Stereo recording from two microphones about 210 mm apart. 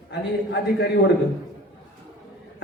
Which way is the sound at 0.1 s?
55° left (ahead or behind).